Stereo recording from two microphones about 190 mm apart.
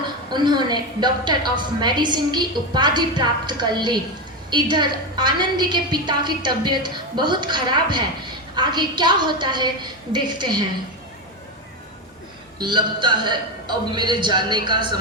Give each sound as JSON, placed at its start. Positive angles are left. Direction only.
{"t": 0.3, "sound": "a woman's voice", "side_deg": -25}
{"t": 12.5, "sound": "a woman's voice", "side_deg": -25}